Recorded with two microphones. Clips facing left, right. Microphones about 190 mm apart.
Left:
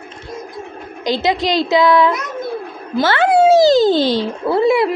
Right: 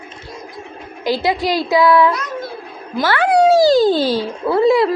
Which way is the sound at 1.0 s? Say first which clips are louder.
Even; 20° left (ahead or behind).